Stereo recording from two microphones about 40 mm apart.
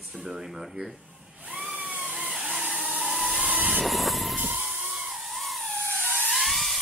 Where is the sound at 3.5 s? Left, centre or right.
Right.